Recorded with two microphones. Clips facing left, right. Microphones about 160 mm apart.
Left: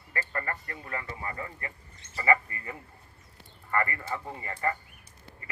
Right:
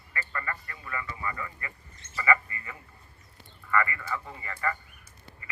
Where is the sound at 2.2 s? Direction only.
40° left (ahead or behind).